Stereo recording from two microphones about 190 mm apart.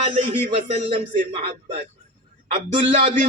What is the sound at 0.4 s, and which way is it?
Speech, 30° right (ahead or behind).